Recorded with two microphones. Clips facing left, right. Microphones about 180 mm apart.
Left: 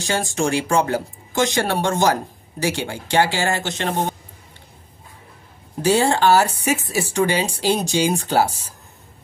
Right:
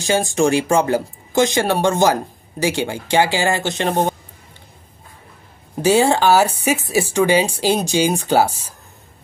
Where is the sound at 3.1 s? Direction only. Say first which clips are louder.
Right 2 dB; 10° right (ahead or behind).